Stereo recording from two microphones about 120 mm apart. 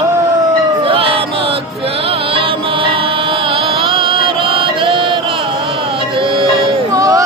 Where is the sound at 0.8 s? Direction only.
50° right (ahead or behind).